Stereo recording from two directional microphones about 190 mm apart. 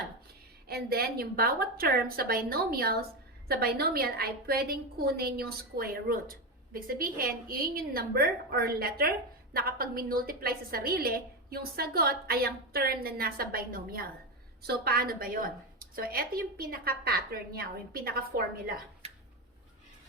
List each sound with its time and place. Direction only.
0.7 s a woman's voice: 55° right (ahead or behind)